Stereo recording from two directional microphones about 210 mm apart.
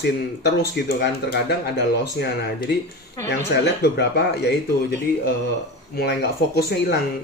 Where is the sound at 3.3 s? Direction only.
55° left (ahead or behind).